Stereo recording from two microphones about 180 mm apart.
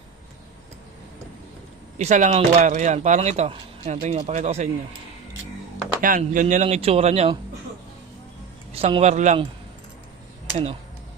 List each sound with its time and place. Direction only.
2.0 s speech: 40° right (ahead or behind)
6.0 s speech: 50° right (ahead or behind)
8.7 s speech: 35° right (ahead or behind)